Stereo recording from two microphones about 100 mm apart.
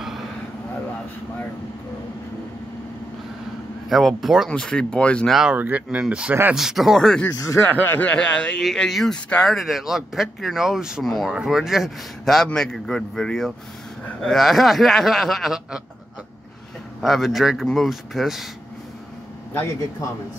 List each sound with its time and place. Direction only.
3.9 s a man's voice: centre (ahead or behind)
5.3 s a man's voice: 5° right (ahead or behind)
7.3 s speech: 30° left (ahead or behind)
7.8 s speech: 15° left (ahead or behind)
8.6 s a man's voice: centre (ahead or behind)
17.0 s a man's voice: centre (ahead or behind)
19.5 s a man's voice: 25° left (ahead or behind)